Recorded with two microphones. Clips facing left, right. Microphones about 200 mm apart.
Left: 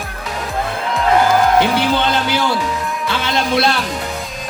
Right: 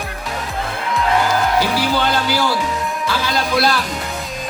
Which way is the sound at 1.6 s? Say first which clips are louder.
Left 2 dB; 20° left (ahead or behind).